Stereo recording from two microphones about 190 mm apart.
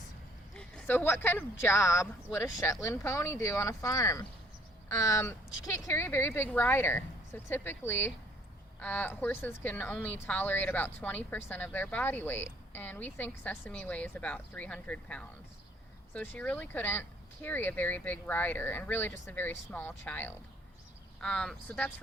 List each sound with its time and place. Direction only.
0.5 s speech: 5° left (ahead or behind)